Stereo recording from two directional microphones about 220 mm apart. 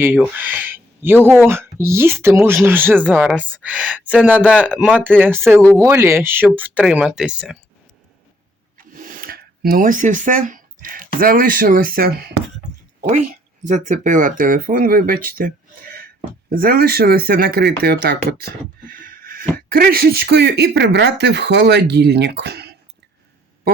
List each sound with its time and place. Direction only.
0.0 s a woman's voice: 10° right (ahead or behind)
8.8 s speech: 40° right (ahead or behind)
13.7 s speech: 35° right (ahead or behind)
15.4 s a sound: 40° right (ahead or behind)
16.5 s speech: 40° right (ahead or behind)